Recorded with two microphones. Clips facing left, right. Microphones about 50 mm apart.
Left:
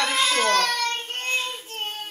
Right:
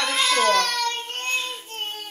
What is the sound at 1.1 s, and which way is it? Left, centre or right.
Child singing, centre.